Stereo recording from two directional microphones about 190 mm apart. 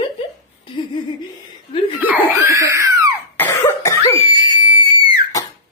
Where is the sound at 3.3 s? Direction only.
15° left (ahead or behind).